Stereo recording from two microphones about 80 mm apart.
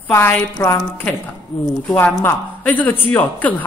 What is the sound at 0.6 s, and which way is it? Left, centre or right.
Speech, left.